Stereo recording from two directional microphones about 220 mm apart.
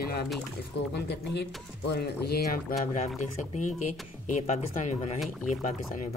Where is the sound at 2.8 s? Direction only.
35° left (ahead or behind).